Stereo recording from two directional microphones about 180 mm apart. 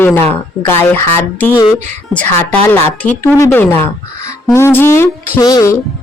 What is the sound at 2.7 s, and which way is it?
Speech, 15° left (ahead or behind).